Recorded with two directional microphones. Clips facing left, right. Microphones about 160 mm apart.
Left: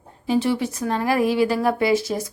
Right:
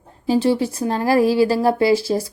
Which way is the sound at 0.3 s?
30° right (ahead or behind).